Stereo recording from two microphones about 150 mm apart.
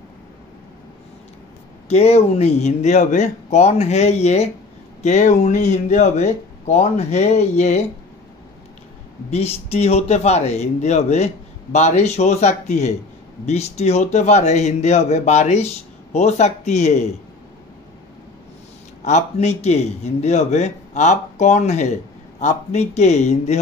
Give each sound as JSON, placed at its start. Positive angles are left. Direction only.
{"t": 1.9, "sound": "a man's voice", "side_deg": 45}
{"t": 9.3, "sound": "a man's voice", "side_deg": 45}
{"t": 19.0, "sound": "a man's voice", "side_deg": 50}